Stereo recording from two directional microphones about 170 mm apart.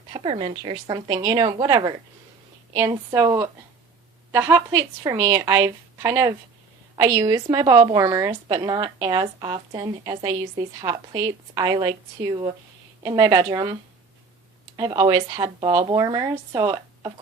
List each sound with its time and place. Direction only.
0.1 s a woman's voice: 30° right (ahead or behind)
14.8 s speech: 25° right (ahead or behind)